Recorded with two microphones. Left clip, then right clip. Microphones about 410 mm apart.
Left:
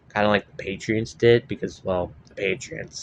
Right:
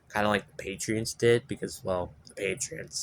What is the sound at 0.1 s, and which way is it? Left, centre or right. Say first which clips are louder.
Speech: left 6 dB; right.